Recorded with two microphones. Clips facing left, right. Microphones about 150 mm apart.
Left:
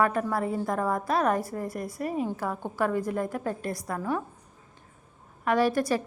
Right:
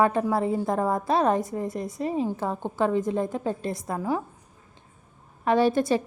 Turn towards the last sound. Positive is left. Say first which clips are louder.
# right 3 dB
turn(degrees=-25)  # may be behind; listen again after turning